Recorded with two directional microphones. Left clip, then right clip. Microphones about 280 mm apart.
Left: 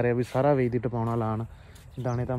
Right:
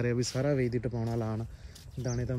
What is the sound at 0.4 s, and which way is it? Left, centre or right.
Speech, left.